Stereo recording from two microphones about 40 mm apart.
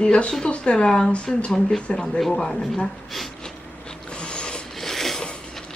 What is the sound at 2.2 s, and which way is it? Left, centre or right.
Speech, centre.